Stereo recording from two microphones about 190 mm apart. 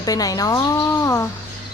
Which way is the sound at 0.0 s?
20° left (ahead or behind).